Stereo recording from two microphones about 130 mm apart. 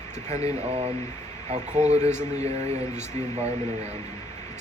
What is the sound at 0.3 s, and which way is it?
Speech, 55° right (ahead or behind).